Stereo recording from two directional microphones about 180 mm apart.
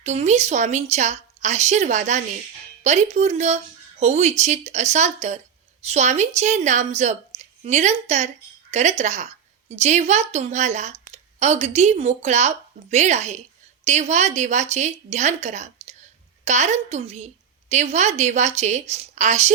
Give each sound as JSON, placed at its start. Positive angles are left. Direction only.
{"t": 0.0, "sound": "a woman's voice", "side_deg": -40}